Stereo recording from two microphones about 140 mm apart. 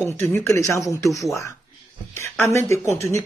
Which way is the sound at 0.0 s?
15° left (ahead or behind).